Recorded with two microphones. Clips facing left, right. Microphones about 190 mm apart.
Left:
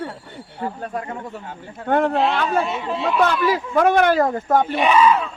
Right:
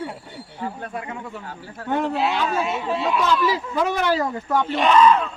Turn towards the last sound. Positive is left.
turn(degrees=5)  # may be behind; listen again after turning